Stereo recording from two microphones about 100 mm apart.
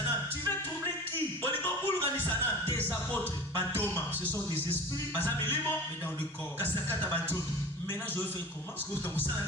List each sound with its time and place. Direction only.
1.6 s music: 20° left (ahead or behind)
5.1 s music: 20° left (ahead or behind)
6.9 s music: 20° left (ahead or behind)